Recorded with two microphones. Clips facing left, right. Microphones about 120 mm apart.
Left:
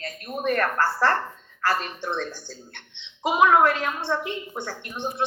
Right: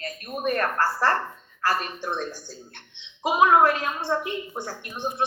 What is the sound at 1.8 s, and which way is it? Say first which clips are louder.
A woman's voice: even; 50° right (ahead or behind).